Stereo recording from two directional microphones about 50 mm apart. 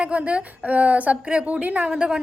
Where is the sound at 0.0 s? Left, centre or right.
Right.